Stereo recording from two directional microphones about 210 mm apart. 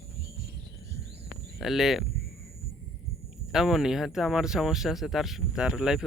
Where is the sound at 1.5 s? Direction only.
Centre (ahead or behind).